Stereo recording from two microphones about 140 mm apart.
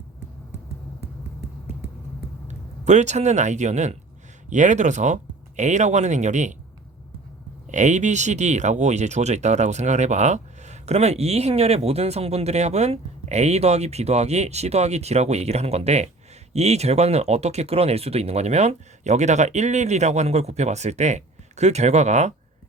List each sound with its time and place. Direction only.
2.5 s speech: 55° right (ahead or behind)
7.7 s speech: 60° right (ahead or behind)